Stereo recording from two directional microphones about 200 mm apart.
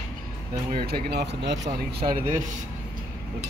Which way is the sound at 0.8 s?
55° right (ahead or behind).